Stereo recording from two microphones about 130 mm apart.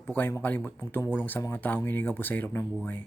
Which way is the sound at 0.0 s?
15° left (ahead or behind).